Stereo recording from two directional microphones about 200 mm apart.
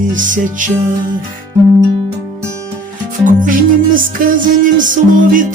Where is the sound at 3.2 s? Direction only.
40° right (ahead or behind).